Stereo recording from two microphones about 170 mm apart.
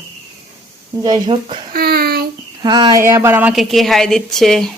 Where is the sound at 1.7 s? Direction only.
65° right (ahead or behind).